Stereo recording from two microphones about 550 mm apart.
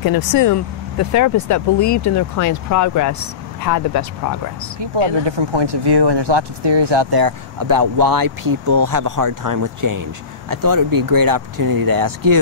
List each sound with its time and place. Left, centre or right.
0.0 s speech: left
4.9 s speech: right